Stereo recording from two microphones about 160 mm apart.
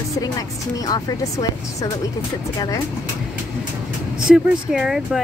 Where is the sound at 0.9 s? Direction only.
25° left (ahead or behind).